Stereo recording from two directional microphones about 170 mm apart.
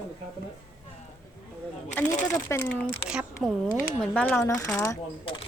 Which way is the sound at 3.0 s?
5° right (ahead or behind).